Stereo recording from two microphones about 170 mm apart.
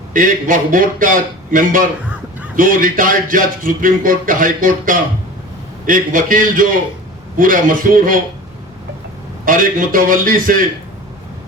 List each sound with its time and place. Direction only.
0.1 s speech: 50° right (ahead or behind)
9.5 s speech: 55° right (ahead or behind)